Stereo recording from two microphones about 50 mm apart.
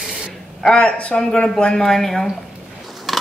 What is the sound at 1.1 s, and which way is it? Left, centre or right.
Speech, centre.